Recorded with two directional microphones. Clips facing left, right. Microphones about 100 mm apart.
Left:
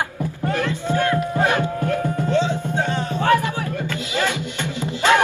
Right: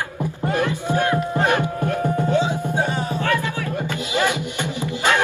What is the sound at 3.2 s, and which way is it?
Music, 20° left (ahead or behind).